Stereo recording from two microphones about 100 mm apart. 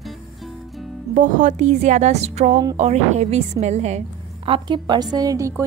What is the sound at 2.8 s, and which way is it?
A woman's voice, 90° right.